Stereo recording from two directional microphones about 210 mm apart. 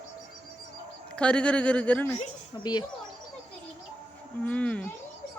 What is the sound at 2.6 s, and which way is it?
Speech, 20° left (ahead or behind).